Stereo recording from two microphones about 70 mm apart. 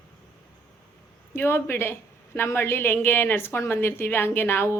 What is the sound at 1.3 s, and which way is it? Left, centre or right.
A woman's voice, left.